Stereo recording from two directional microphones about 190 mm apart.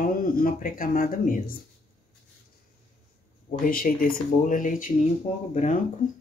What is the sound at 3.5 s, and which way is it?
Speech, 45° left (ahead or behind).